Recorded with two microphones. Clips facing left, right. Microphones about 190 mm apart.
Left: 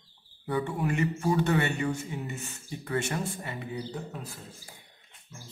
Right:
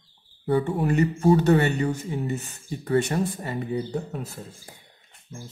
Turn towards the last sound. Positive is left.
turn(degrees=-50)  # may be behind; listen again after turning